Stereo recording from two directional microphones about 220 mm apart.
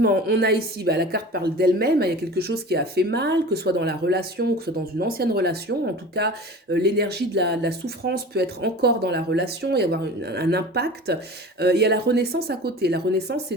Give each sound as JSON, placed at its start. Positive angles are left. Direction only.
{"t": 0.0, "sound": "a woman's voice", "side_deg": -45}